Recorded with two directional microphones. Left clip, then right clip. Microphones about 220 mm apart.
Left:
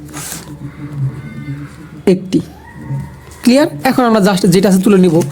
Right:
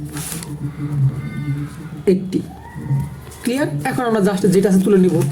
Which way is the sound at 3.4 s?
40° left (ahead or behind).